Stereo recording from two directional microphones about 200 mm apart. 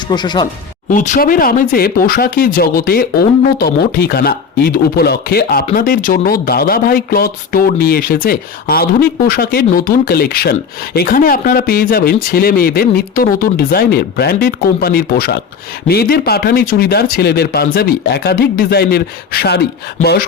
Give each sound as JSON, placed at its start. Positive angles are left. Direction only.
{"t": 0.1, "sound": "speech", "side_deg": 20}
{"t": 0.9, "sound": "speech", "side_deg": 40}